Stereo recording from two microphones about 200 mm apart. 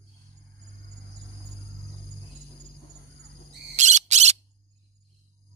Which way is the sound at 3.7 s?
35° right (ahead or behind).